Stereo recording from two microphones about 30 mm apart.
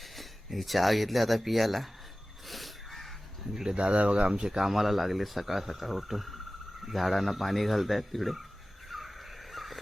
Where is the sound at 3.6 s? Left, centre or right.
Right.